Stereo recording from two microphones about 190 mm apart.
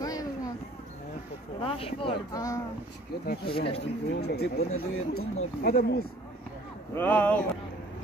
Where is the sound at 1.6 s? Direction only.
30° left (ahead or behind).